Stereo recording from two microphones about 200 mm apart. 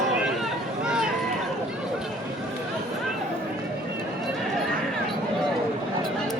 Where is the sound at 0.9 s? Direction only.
5° right (ahead or behind).